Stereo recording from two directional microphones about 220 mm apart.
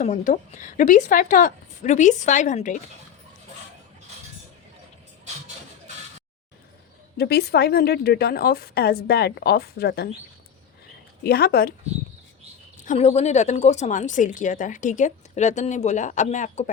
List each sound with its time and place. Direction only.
0.0 s a woman's voice: 35° left (ahead or behind)
7.2 s a woman's voice: 45° left (ahead or behind)
11.2 s a woman's voice: 45° left (ahead or behind)
12.8 s a woman's voice: 30° left (ahead or behind)